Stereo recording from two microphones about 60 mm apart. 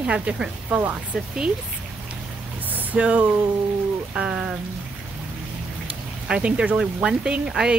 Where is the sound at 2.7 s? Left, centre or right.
Right.